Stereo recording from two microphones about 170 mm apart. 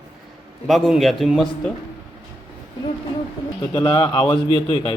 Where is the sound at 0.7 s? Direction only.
Centre (ahead or behind).